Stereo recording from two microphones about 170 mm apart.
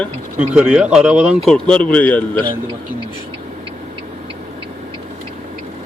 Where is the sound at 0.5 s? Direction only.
5° right (ahead or behind).